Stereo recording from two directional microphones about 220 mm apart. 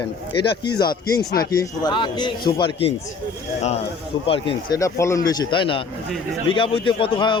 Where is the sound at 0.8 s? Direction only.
20° left (ahead or behind).